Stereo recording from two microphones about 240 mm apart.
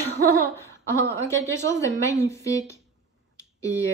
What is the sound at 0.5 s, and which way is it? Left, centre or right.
A woman's voice, centre.